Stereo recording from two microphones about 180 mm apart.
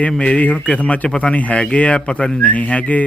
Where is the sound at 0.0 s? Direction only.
5° left (ahead or behind).